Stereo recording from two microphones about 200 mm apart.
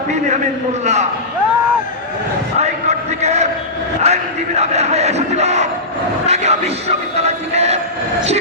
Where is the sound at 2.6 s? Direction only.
35° right (ahead or behind).